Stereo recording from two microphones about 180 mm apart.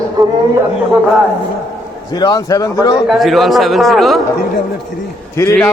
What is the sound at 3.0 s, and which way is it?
Speech, centre (ahead or behind).